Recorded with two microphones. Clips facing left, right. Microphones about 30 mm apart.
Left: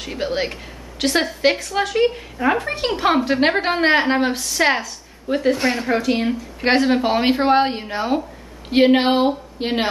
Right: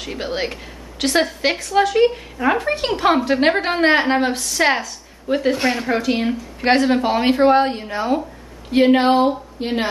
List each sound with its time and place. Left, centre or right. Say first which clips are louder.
0.0 s a woman's voice: left 1 dB; centre; by 9.8 s left